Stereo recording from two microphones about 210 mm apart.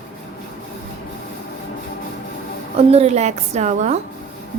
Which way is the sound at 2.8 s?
30° right (ahead or behind).